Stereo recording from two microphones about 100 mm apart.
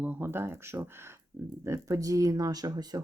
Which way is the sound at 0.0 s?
20° right (ahead or behind).